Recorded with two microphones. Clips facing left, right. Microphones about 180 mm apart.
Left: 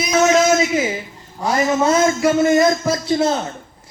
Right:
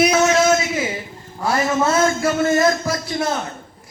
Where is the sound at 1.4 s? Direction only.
15° left (ahead or behind).